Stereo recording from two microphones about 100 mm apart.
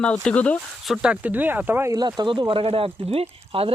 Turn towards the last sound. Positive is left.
turn(degrees=-70)  # may be behind; listen again after turning